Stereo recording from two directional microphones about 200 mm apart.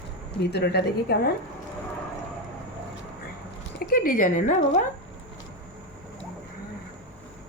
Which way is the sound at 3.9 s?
45° left (ahead or behind).